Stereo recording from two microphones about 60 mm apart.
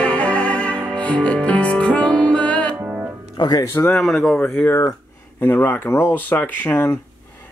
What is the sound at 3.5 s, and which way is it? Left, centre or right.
Music, left.